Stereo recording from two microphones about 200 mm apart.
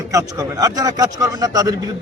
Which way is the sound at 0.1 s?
15° right (ahead or behind).